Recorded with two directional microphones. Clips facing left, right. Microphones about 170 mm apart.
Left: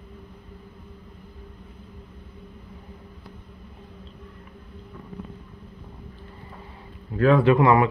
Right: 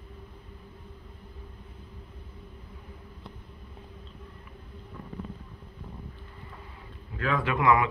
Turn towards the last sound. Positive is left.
turn(degrees=35)  # may be behind; listen again after turning